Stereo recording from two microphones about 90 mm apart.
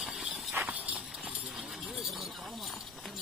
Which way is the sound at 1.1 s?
5° right (ahead or behind).